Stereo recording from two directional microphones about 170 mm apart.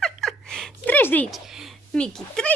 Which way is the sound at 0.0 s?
Centre (ahead or behind).